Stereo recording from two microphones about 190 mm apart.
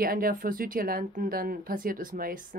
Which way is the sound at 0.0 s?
50° right (ahead or behind).